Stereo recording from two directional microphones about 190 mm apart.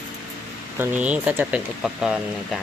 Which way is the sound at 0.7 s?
10° right (ahead or behind).